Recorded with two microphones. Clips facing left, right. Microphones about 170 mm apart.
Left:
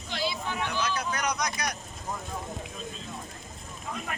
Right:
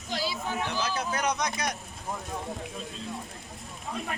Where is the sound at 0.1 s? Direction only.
40° right (ahead or behind).